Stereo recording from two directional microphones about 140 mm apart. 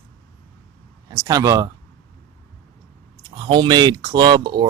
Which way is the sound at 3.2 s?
30° right (ahead or behind).